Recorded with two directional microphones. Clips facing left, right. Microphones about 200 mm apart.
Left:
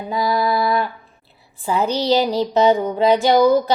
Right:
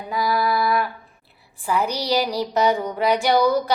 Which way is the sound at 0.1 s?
25° left (ahead or behind).